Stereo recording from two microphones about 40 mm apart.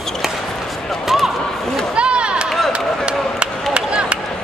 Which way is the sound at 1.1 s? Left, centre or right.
Centre.